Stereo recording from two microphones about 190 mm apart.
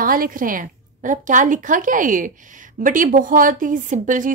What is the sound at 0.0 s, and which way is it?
A woman's voice, 50° right (ahead or behind).